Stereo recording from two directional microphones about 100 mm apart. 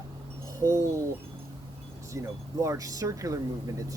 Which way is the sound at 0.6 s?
30° right (ahead or behind).